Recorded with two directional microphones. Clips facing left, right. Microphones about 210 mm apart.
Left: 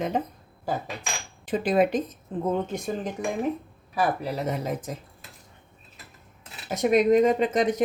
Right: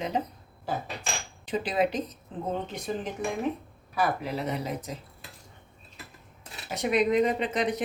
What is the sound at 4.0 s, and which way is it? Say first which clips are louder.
Speech: left 2 dB; 40° left (ahead or behind).